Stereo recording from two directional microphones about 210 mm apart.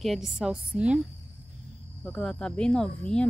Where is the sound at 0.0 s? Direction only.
Centre (ahead or behind).